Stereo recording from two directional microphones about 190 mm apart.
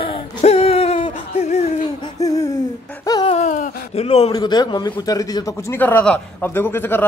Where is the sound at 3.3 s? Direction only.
40° left (ahead or behind).